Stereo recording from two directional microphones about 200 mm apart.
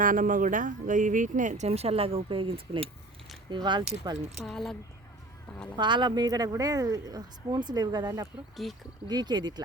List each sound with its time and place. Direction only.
0.0 s speech: 40° right (ahead or behind); by 3.8 s 20° right (ahead or behind)
4.4 s speech: centre (ahead or behind)
5.7 s speech: 25° right (ahead or behind)
8.6 s speech: centre (ahead or behind)
9.0 s speech: 20° right (ahead or behind)